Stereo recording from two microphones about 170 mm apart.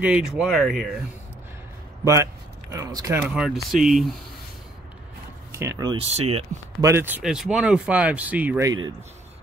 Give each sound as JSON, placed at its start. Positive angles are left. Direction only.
{"t": 0.0, "sound": "speech", "side_deg": -5}
{"t": 2.7, "sound": "speech", "side_deg": -20}
{"t": 3.3, "sound": "speech", "side_deg": 0}
{"t": 5.5, "sound": "speech", "side_deg": -15}
{"t": 5.9, "sound": "speech", "side_deg": -35}
{"t": 6.8, "sound": "speech", "side_deg": -15}